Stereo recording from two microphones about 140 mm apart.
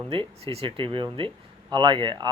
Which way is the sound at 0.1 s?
40° right (ahead or behind).